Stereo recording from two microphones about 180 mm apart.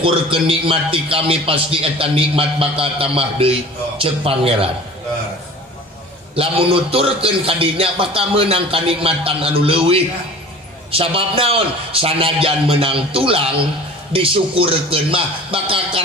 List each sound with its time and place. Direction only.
0.0 s a man's voice: 30° right (ahead or behind)
6.3 s a man's voice: 30° right (ahead or behind)